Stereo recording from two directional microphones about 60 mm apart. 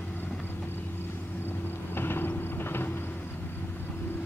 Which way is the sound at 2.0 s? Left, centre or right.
Left.